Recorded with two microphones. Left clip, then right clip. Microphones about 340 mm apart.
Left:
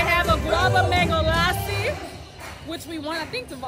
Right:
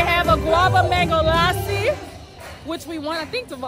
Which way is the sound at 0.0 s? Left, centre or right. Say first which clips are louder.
Right 3 dB; centre.